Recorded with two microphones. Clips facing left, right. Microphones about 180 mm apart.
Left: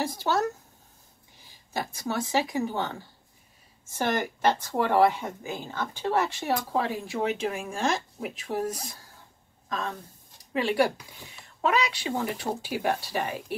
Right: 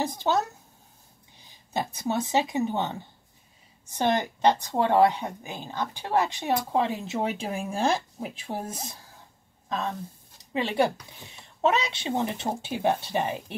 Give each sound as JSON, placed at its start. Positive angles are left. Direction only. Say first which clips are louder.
{"t": 0.0, "sound": "a woman's voice", "louder": "right 1 dB", "side_deg": -20}
{"t": 1.5, "sound": "a woman's voice", "louder": "right 3 dB", "side_deg": -20}
{"t": 10.5, "sound": "a woman's voice", "louder": "even", "side_deg": -25}